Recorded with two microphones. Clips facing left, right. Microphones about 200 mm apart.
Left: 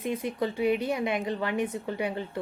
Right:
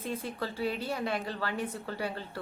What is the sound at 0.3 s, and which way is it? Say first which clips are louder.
A woman's voice: left 9 dB; 20° left (ahead or behind).